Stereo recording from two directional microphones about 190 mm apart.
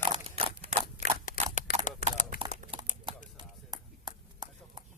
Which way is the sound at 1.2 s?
45° left (ahead or behind).